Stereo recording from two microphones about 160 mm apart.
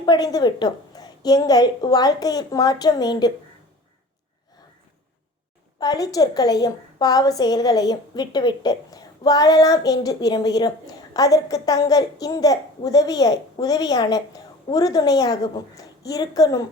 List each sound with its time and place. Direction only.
0.0 s a woman's voice: 25° left (ahead or behind)
5.8 s a woman's voice: 25° left (ahead or behind)